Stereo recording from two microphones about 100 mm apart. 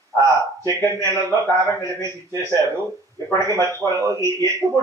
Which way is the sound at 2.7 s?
30° left (ahead or behind).